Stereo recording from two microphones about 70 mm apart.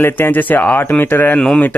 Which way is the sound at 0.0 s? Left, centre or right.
Left.